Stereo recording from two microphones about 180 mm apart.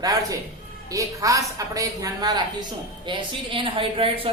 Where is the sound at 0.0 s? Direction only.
20° right (ahead or behind).